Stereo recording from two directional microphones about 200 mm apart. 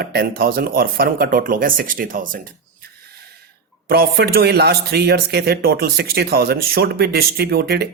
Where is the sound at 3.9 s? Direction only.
50° right (ahead or behind).